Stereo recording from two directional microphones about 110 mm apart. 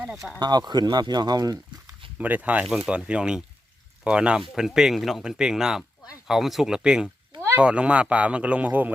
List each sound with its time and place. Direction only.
0.3 s speech: 40° right (ahead or behind)
2.1 s a man's voice: 15° right (ahead or behind)
2.6 s a man's voice: centre (ahead or behind)